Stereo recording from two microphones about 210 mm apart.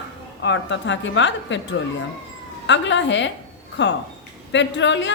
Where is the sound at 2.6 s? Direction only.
60° left (ahead or behind).